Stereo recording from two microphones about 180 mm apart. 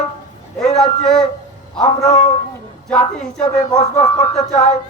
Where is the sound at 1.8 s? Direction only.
35° left (ahead or behind).